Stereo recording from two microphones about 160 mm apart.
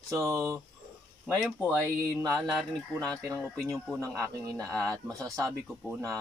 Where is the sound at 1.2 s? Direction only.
5° right (ahead or behind).